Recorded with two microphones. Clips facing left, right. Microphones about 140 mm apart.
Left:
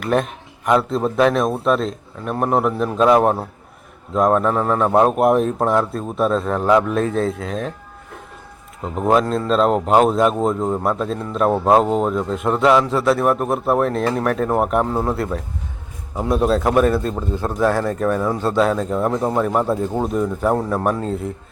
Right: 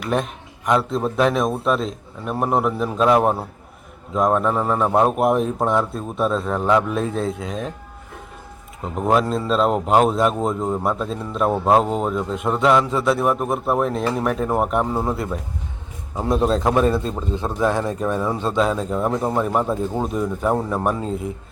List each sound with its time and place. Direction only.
0.0 s speech: centre (ahead or behind)
9.0 s speech: centre (ahead or behind)
17.7 s speech: 15° right (ahead or behind)
18.7 s speech: 5° right (ahead or behind)
20.1 s speech: centre (ahead or behind)